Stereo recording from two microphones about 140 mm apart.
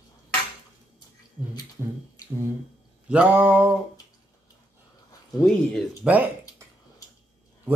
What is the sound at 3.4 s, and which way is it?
Speech, 10° right (ahead or behind).